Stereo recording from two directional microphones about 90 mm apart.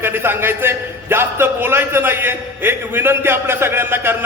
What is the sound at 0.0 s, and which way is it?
A man's voice, 25° right (ahead or behind).